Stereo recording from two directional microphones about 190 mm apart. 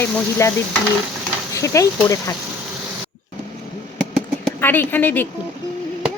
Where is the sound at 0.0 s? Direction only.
15° left (ahead or behind).